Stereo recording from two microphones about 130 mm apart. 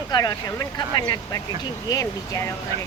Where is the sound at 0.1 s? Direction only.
30° left (ahead or behind).